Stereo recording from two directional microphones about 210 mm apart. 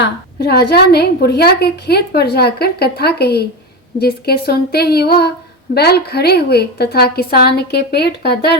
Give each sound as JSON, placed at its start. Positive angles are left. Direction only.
{"t": 0.0, "sound": "a woman's voice", "side_deg": 50}